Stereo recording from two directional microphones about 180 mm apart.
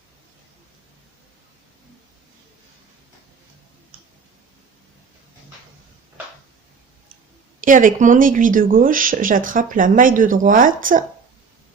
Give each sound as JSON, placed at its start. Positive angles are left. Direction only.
{"t": 7.6, "sound": "speech", "side_deg": -45}